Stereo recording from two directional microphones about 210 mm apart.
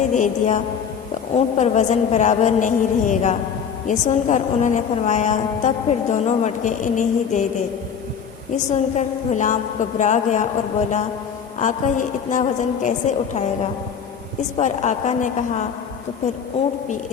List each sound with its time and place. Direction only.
0.1 s a woman's voice: 35° left (ahead or behind)
8.7 s a woman's voice: 35° left (ahead or behind)
14.5 s a woman's voice: 35° left (ahead or behind)